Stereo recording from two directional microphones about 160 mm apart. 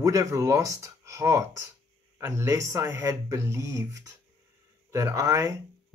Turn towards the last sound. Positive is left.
turn(degrees=-20)  # may be behind; listen again after turning